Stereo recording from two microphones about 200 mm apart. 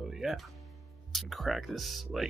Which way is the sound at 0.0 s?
Centre (ahead or behind).